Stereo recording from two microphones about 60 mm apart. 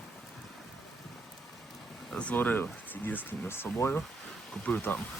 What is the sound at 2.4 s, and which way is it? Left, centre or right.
Speech, left.